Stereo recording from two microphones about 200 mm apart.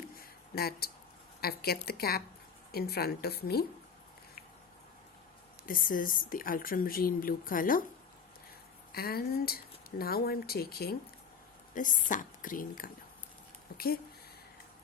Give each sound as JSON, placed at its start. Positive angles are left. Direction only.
{"t": 0.2, "sound": "a sound", "side_deg": 50}
{"t": 1.4, "sound": "speech", "side_deg": 50}
{"t": 5.6, "sound": "speech", "side_deg": 45}
{"t": 8.9, "sound": "speech", "side_deg": 50}
{"t": 11.7, "sound": "a woman's voice", "side_deg": 40}